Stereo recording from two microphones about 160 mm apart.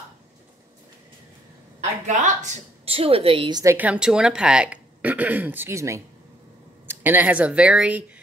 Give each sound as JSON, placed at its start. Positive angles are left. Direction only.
{"t": 2.0, "sound": "a woman's voice", "side_deg": -50}
{"t": 3.6, "sound": "speech", "side_deg": -10}